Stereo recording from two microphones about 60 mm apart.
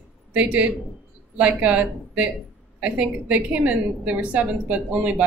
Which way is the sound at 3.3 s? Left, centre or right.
Right.